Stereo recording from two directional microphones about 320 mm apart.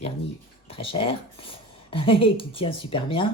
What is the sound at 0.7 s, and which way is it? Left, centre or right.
Speech, centre.